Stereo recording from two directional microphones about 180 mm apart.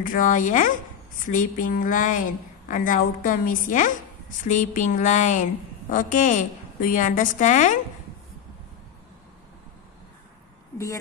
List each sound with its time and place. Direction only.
0.0 s a woman's voice: 50° left (ahead or behind)